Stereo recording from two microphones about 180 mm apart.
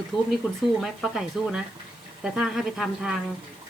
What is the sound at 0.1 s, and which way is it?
Speech, 25° left (ahead or behind).